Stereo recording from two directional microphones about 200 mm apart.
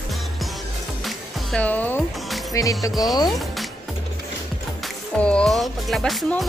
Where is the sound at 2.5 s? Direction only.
15° left (ahead or behind).